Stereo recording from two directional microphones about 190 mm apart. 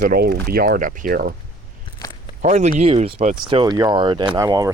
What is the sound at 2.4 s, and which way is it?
Speech, 35° right (ahead or behind).